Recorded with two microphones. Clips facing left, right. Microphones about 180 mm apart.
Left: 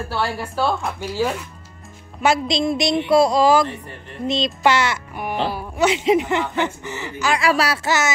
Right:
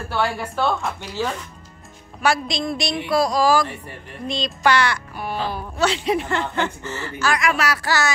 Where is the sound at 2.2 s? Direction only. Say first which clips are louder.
Left 3 dB; 20° left (ahead or behind).